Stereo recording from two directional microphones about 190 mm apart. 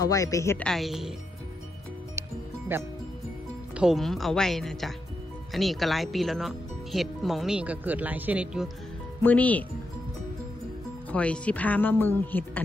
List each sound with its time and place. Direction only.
0.0 s speech: 15° left (ahead or behind)
0.7 s speech: centre (ahead or behind)
2.7 s speech: 10° right (ahead or behind)
3.7 s speech: centre (ahead or behind)
9.2 s speech: 10° left (ahead or behind)
11.1 s speech: 5° left (ahead or behind)